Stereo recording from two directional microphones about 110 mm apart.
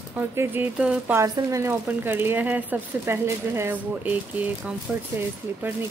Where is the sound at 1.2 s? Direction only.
30° right (ahead or behind).